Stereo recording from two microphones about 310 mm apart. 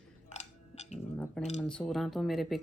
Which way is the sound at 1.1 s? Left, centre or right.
Centre.